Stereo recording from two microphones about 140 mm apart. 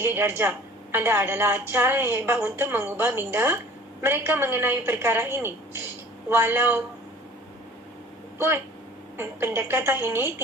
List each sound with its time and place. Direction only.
0.0 s a woman's voice: 15° right (ahead or behind)
9.1 s a woman's voice: 15° right (ahead or behind)